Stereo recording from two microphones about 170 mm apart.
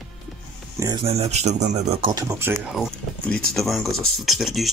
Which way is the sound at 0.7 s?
20° right (ahead or behind).